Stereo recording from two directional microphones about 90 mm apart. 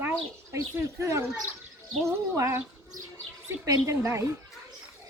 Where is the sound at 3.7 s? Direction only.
35° right (ahead or behind).